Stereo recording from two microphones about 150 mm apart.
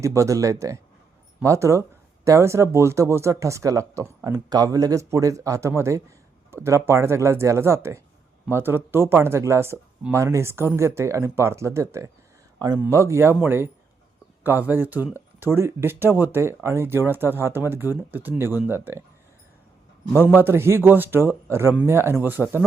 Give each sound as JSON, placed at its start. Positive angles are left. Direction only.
{"t": 0.0, "sound": "speech", "side_deg": -20}
{"t": 20.2, "sound": "speech", "side_deg": -15}